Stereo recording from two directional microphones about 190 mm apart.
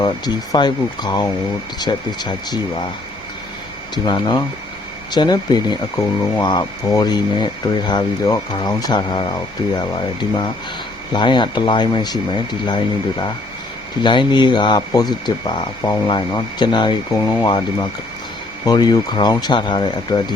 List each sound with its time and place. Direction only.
0.0 s speech: 25° left (ahead or behind)
3.9 s speech: 20° left (ahead or behind)
18.6 s speech: 20° left (ahead or behind)